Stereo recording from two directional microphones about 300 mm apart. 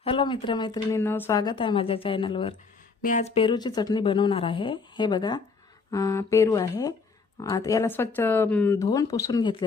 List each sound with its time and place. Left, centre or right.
0.0 s speech: centre